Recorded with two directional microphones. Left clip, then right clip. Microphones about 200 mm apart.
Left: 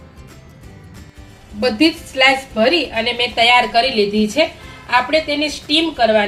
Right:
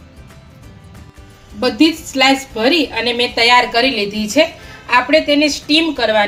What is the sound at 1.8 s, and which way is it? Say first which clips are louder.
A woman's voice: right 1 dB; 30° right (ahead or behind).